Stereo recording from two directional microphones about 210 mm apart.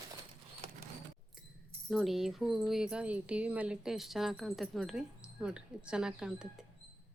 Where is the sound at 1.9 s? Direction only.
Centre (ahead or behind).